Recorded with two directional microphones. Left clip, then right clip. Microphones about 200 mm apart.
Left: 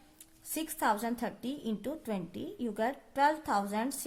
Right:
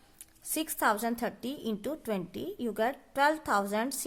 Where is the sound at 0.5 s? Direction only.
35° right (ahead or behind).